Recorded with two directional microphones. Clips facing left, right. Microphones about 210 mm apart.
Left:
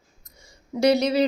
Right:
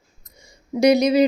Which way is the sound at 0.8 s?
15° right (ahead or behind).